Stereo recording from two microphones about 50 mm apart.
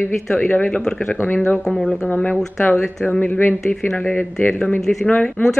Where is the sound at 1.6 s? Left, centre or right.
Left.